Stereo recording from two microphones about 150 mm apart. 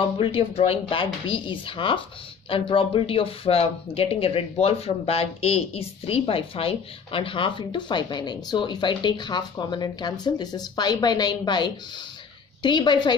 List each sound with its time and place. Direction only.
0.0 s speech: 35° left (ahead or behind)